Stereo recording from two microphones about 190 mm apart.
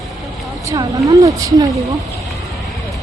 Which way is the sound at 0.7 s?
20° right (ahead or behind).